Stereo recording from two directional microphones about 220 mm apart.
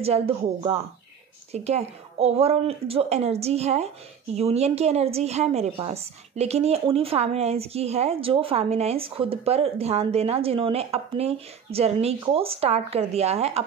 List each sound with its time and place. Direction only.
1.5 s a woman's voice: 30° right (ahead or behind)